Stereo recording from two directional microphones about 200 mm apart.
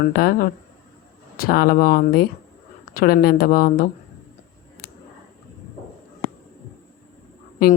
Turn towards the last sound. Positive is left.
turn(degrees=45)  # may be behind; listen again after turning